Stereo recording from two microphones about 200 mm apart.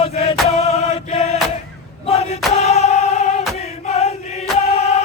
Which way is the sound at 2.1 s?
35° left (ahead or behind).